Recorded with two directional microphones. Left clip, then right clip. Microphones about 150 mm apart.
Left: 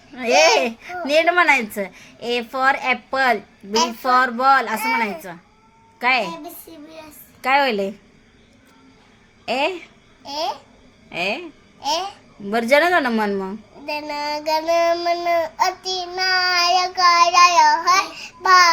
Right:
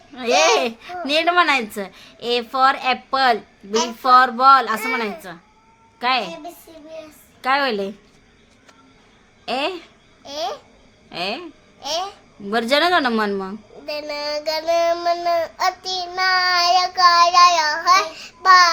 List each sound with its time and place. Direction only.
0.1 s a sound: centre (ahead or behind)
0.6 s a woman's voice: centre (ahead or behind)
7.4 s a woman's voice: centre (ahead or behind)
9.5 s a woman's voice: centre (ahead or behind)
10.2 s a woman's voice: 15° right (ahead or behind)
11.1 s a woman's voice: centre (ahead or behind)
11.8 s a woman's voice: 15° right (ahead or behind)
13.8 s child singing: 20° right (ahead or behind)